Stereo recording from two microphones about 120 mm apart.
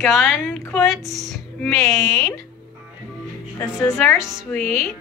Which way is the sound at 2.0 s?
30° left (ahead or behind).